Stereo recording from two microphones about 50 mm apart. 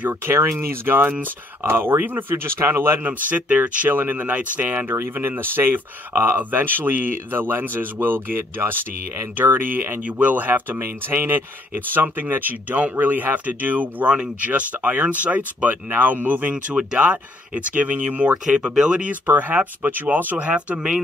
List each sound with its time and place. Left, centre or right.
0.1 s speech: right
3.0 s speech: right
10.0 s speech: right
14.0 s speech: right
19.2 s speech: right; by 21.0 s centre